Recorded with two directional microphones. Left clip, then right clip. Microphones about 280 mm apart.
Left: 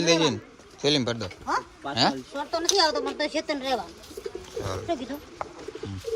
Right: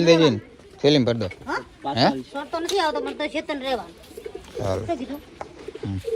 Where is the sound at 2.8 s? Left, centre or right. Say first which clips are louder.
Right 1 dB; left.